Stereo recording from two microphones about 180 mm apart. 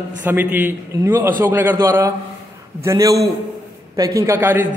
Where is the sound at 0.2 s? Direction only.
10° right (ahead or behind).